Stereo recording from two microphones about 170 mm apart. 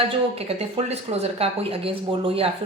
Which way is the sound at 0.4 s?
40° right (ahead or behind).